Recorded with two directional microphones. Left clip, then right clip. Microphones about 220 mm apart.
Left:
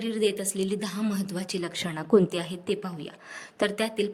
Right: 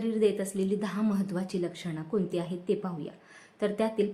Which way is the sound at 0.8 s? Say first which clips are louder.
Even; centre (ahead or behind).